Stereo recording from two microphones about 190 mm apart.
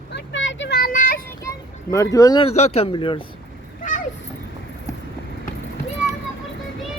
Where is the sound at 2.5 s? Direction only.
35° left (ahead or behind).